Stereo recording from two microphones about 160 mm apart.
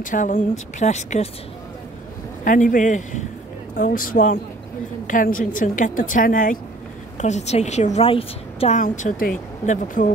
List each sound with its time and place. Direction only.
0.0 s a woman's voice: 55° left (ahead or behind)
2.4 s a woman's voice: 55° left (ahead or behind)
7.2 s a woman's voice: 45° left (ahead or behind)
8.8 s a woman's voice: 55° left (ahead or behind)